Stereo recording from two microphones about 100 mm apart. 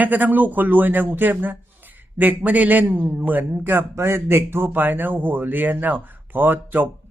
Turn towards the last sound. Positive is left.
turn(degrees=-20)  # may be behind; listen again after turning